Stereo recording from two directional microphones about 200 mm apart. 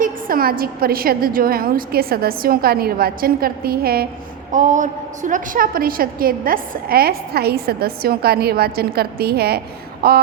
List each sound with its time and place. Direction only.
0.0 s a woman's voice: 45° right (ahead or behind)
4.5 s a woman's voice: 40° right (ahead or behind)